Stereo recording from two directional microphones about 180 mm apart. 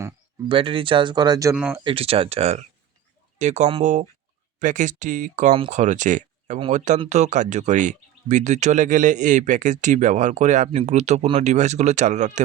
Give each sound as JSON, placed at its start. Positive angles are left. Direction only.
{"t": 0.4, "sound": "speech", "side_deg": -30}
{"t": 1.5, "sound": "speech", "side_deg": -5}
{"t": 1.8, "sound": "speech", "side_deg": -30}